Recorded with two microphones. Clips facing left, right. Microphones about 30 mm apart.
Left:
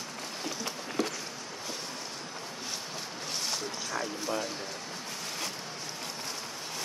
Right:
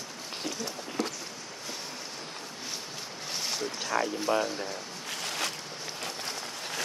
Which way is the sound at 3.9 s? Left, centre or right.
Right.